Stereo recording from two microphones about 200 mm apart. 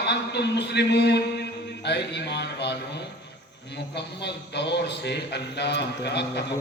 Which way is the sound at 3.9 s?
55° left (ahead or behind).